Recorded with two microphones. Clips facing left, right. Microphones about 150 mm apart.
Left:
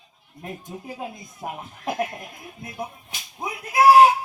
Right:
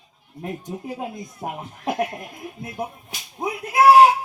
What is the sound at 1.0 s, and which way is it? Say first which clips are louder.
Speech: right 3 dB; 25° right (ahead or behind).